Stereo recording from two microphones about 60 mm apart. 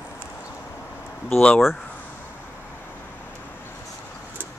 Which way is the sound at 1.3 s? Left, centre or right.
Centre.